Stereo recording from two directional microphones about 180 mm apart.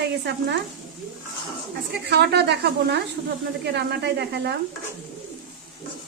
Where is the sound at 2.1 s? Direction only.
65° right (ahead or behind).